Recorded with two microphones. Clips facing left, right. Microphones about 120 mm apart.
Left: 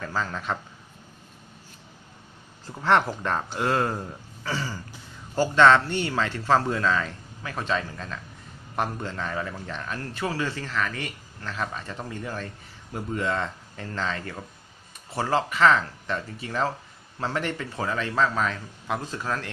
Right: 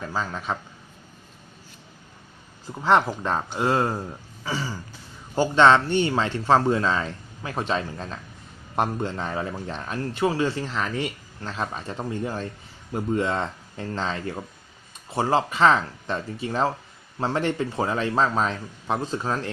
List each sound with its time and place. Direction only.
0.0 s speech: 10° right (ahead or behind)
2.6 s a man's voice: 15° right (ahead or behind)